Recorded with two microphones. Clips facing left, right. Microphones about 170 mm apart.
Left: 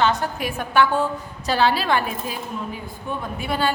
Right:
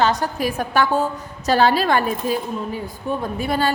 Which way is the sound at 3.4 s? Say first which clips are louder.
Right 1 dB; 40° right (ahead or behind).